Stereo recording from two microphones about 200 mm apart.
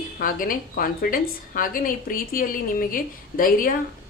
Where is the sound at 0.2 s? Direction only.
45° left (ahead or behind).